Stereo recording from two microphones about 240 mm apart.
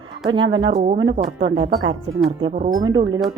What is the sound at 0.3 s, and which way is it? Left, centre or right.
Speech, centre.